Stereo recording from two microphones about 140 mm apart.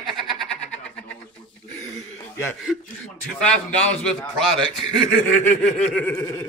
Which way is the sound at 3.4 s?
5° left (ahead or behind).